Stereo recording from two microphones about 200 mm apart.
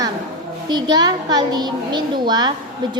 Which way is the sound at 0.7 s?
20° right (ahead or behind).